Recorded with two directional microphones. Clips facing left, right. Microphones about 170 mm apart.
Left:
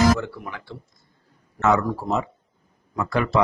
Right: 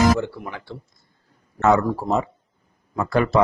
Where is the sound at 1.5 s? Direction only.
35° right (ahead or behind).